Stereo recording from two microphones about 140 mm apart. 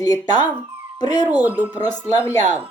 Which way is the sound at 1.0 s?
30° left (ahead or behind).